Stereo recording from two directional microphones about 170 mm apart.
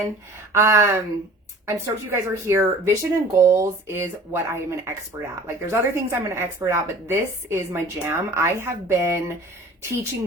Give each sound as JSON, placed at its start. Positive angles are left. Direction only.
{"t": 0.5, "sound": "speech", "side_deg": -15}